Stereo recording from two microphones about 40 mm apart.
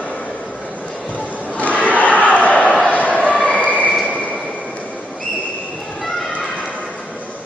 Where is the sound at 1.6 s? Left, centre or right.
Left.